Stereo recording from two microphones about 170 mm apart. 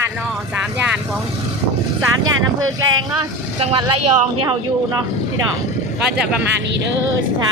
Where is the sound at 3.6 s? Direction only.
30° right (ahead or behind).